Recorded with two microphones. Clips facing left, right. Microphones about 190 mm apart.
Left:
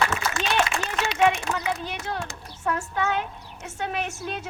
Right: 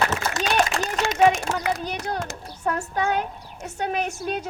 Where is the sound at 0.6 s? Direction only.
40° right (ahead or behind).